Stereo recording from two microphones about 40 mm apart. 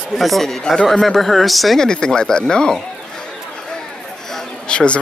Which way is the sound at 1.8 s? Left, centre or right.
Centre.